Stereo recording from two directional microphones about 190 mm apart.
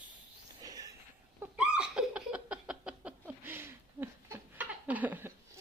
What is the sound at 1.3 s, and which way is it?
Giggle, 5° right (ahead or behind).